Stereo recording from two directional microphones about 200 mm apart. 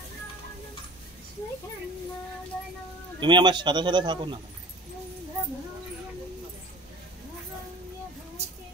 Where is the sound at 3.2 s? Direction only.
25° right (ahead or behind).